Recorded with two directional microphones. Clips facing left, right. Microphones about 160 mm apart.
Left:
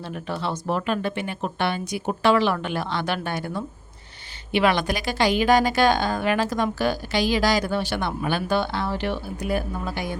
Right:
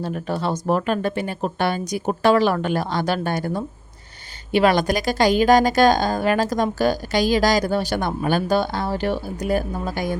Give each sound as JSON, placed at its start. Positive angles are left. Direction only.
{"t": 0.0, "sound": "a woman's voice", "side_deg": -40}